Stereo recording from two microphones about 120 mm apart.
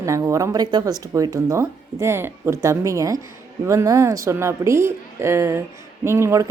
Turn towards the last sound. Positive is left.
turn(degrees=-25)  # may be behind; listen again after turning